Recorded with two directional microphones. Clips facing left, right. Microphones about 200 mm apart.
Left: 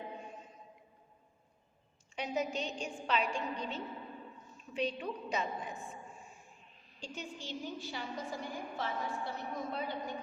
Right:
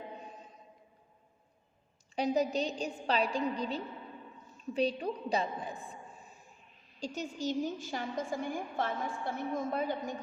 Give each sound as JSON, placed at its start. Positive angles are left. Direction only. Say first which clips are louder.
{"t": 2.1, "sound": "a woman's voice", "louder": "right 6 dB", "side_deg": -35}